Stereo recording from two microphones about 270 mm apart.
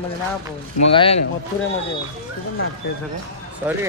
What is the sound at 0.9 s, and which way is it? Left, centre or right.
Speech, centre.